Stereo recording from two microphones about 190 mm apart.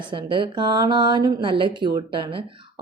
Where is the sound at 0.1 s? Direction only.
25° right (ahead or behind).